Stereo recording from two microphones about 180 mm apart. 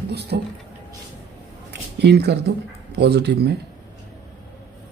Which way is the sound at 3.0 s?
70° right (ahead or behind).